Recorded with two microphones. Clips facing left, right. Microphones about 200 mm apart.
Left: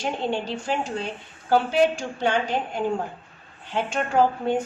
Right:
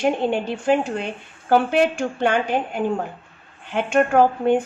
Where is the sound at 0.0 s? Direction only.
55° right (ahead or behind).